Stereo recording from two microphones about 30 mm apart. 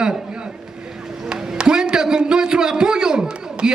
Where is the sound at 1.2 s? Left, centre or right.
Right.